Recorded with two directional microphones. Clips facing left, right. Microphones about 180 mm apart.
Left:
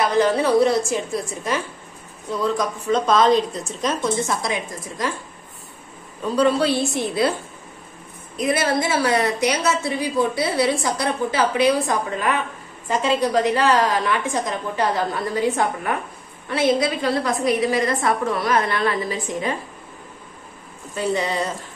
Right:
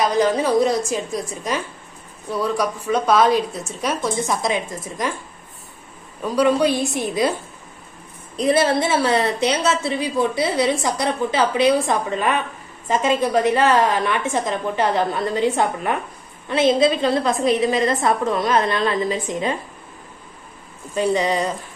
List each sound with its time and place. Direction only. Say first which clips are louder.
0.0 s a woman's voice: even; 15° right (ahead or behind)
6.2 s a woman's voice: right 1 dB; 15° right (ahead or behind)
8.4 s a woman's voice: right 3 dB; 30° right (ahead or behind)
20.9 s a woman's voice: right 3 dB; 15° right (ahead or behind)